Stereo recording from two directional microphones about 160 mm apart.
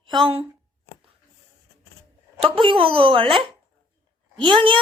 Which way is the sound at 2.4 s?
30° right (ahead or behind).